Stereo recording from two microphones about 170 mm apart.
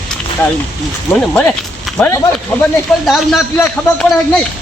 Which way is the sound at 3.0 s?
Centre (ahead or behind).